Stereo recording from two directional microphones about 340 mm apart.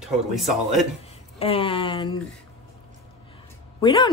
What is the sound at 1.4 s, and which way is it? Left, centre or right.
Speech, centre.